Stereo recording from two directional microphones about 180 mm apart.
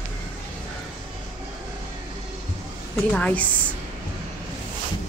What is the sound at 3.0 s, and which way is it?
Speech, 10° left (ahead or behind).